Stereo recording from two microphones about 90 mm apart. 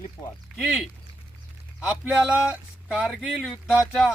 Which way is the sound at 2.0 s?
15° right (ahead or behind).